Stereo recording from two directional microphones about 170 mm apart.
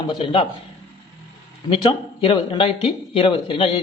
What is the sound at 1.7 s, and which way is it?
Speech, 30° left (ahead or behind).